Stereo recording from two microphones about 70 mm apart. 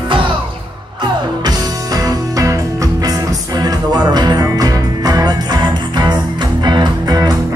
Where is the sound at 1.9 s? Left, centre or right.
Right.